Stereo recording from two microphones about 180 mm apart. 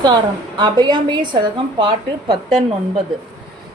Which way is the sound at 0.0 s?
25° right (ahead or behind).